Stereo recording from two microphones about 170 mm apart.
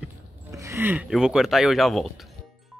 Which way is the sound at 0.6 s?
15° right (ahead or behind).